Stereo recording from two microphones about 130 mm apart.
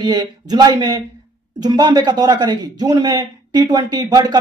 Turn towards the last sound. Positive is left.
turn(degrees=-30)  # may be behind; listen again after turning